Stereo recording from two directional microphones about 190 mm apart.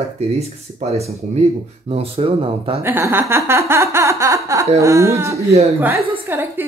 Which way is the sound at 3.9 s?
15° right (ahead or behind).